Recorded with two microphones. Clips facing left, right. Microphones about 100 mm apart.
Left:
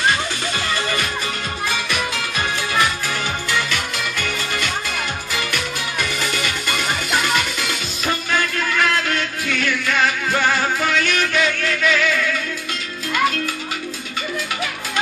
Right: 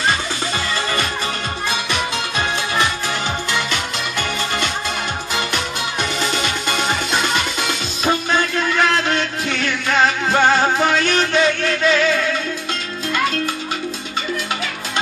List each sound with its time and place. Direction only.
1.7 s music: 25° right (ahead or behind)
3.5 s music: 25° right (ahead or behind)